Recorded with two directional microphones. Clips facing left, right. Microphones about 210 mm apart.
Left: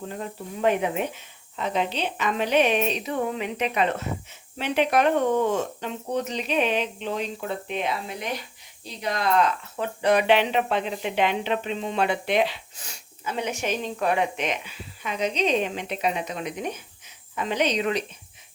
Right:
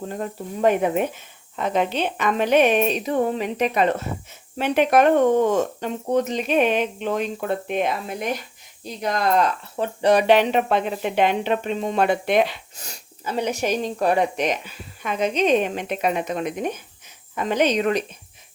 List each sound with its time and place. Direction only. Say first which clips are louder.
0.1 s speech: right 4 dB; 45° right (ahead or behind)
9.7 s speech: right 4 dB; 30° right (ahead or behind)
15.0 s speech: right 4 dB; 50° right (ahead or behind)